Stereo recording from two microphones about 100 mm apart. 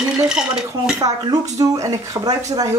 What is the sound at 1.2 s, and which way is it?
Speech, 40° right (ahead or behind).